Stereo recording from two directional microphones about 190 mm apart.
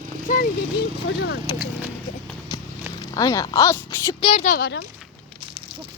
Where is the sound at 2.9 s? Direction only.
20° left (ahead or behind).